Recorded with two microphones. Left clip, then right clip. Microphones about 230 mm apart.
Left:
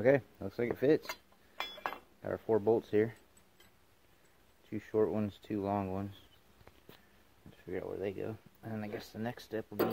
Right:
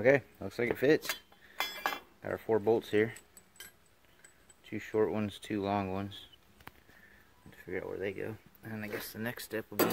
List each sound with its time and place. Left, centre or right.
0.0 s speech: centre
2.2 s speech: centre
4.6 s speech: centre
7.7 s speech: centre